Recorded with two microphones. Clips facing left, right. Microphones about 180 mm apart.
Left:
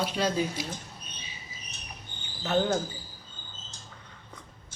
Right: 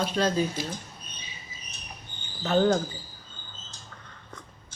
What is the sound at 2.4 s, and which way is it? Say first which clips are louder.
Speech: right 4 dB; 5° left (ahead or behind).